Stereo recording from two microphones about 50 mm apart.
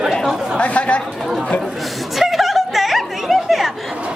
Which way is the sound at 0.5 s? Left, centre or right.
Left.